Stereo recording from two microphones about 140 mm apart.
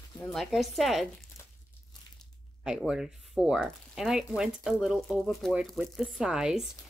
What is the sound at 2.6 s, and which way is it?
Speech, 5° right (ahead or behind).